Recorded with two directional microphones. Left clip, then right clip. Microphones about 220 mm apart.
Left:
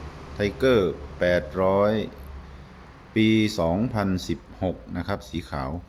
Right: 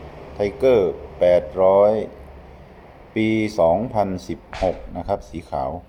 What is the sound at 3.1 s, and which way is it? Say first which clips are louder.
Speech: right 2 dB; 20° left (ahead or behind).